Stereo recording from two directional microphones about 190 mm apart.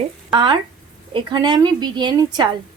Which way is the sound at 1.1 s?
20° right (ahead or behind).